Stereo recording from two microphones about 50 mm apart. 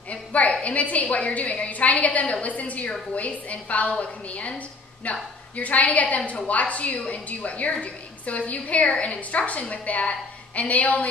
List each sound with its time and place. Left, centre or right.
0.1 s a woman's voice: left